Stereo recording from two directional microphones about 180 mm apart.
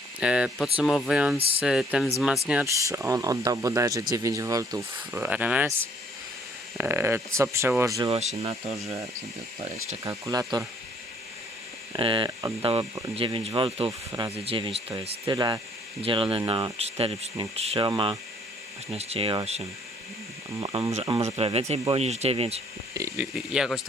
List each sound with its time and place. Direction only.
0.2 s speech: 5° right (ahead or behind)
1.4 s speech: 30° right (ahead or behind)
1.6 s speech: 5° right (ahead or behind)
6.7 s speech: 15° right (ahead or behind)
8.1 s speech: 35° right (ahead or behind)
10.0 s speech: 20° right (ahead or behind)
11.9 s speech: 30° right (ahead or behind)
14.1 s speech: 15° right (ahead or behind)
14.4 s speech: 30° right (ahead or behind)
20.9 s speech: 30° right (ahead or behind)
23.0 s a sound: 15° right (ahead or behind)
23.2 s speech: 5° right (ahead or behind)